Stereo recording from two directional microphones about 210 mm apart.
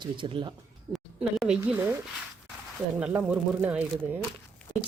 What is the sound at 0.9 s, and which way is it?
A woman's voice, centre (ahead or behind).